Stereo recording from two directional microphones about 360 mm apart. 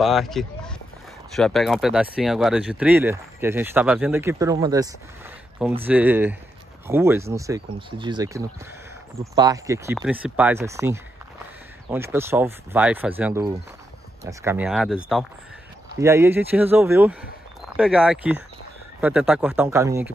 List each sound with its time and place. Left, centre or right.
0.0 s speech: centre